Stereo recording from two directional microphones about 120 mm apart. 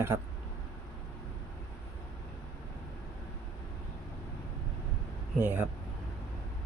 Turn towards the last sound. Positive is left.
turn(degrees=-15)  # may be behind; listen again after turning